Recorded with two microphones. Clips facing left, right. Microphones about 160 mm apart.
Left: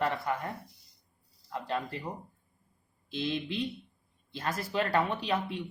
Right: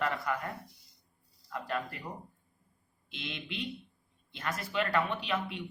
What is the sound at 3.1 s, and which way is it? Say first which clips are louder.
Speech: left 9 dB; 30° left (ahead or behind).